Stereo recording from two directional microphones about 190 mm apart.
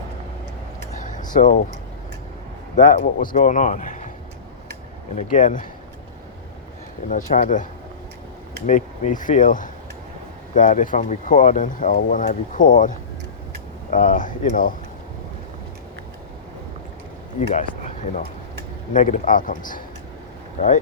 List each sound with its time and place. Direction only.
0.9 s a sound: 40° left (ahead or behind)
2.7 s a man's voice: 40° left (ahead or behind)
5.1 s speech: 40° left (ahead or behind)
7.1 s speech: 45° left (ahead or behind)
13.9 s speech: 45° left (ahead or behind)
17.5 s a sound: 40° left (ahead or behind)
18.9 s speech: 40° left (ahead or behind)